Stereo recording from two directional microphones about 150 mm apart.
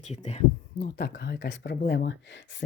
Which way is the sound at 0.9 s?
90° left.